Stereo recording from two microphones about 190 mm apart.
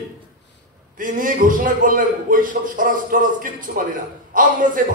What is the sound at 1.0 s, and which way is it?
Speech, 45° right (ahead or behind).